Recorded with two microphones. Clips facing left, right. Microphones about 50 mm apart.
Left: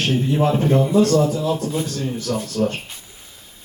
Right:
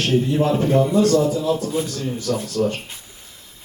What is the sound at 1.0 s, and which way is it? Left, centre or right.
Speech, left.